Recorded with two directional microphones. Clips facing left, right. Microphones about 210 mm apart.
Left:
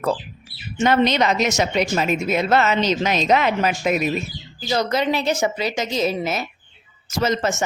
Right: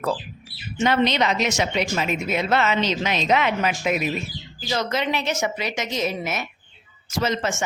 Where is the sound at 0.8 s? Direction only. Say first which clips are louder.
Left 3 dB; 45° left (ahead or behind).